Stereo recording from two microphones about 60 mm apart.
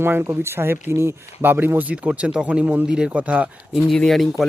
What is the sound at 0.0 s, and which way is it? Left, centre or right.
Speech, right.